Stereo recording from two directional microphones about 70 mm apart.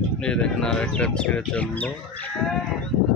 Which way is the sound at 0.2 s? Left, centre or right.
Centre.